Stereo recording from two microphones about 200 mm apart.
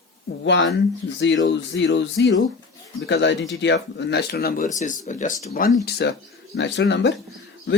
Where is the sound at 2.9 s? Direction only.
60° left (ahead or behind).